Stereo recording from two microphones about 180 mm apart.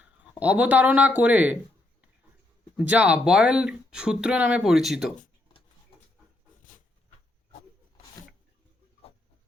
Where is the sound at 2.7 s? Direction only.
10° right (ahead or behind).